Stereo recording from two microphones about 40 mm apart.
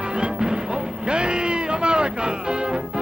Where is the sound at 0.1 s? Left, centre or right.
Right.